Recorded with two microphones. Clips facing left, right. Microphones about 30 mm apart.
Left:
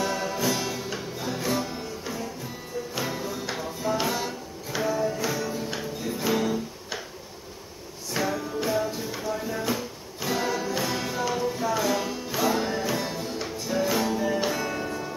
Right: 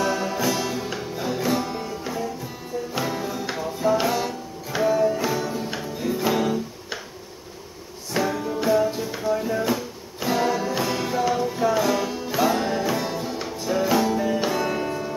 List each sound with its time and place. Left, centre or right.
0.0 s music: centre
2.9 s music: centre
8.1 s music: centre
14.5 s music: right